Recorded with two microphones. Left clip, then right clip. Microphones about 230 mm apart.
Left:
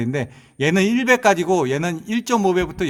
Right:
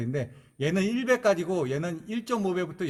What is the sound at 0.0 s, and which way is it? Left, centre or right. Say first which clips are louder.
A man's voice: left 8 dB; left.